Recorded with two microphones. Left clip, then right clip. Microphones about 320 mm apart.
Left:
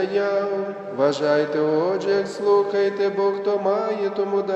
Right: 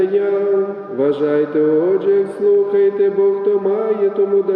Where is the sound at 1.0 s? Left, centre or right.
Centre.